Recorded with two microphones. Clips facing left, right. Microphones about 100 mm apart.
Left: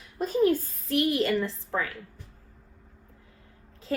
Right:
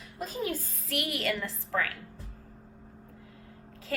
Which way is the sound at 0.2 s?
35° left (ahead or behind).